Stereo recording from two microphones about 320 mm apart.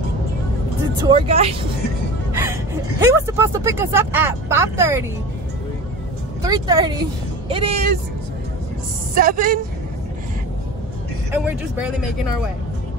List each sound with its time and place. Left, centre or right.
1.0 s speech: centre
2.3 s speech: centre
6.4 s speech: centre
9.1 s a woman's voice: right
11.4 s speech: centre